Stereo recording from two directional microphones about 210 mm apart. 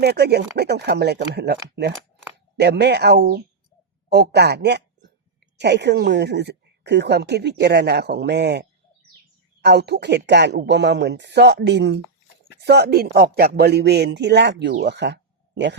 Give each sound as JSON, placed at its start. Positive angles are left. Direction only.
{"t": 0.0, "sound": "a man's voice", "side_deg": -50}
{"t": 9.6, "sound": "speech", "side_deg": -55}
{"t": 14.8, "sound": "a sound", "side_deg": -55}